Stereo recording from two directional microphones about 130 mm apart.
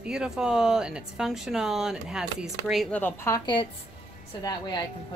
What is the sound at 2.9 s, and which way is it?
Speech, 15° left (ahead or behind).